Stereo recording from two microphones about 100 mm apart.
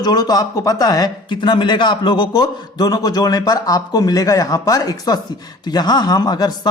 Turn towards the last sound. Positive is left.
turn(degrees=40)  # may be behind; listen again after turning